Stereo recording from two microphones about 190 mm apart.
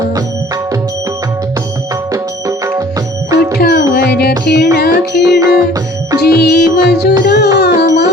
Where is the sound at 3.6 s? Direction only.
55° left (ahead or behind).